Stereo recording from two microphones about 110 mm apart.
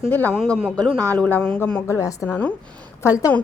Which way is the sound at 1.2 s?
15° left (ahead or behind).